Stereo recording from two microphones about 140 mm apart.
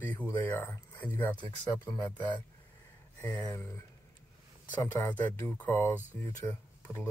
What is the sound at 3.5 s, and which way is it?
A man's voice, 20° left (ahead or behind).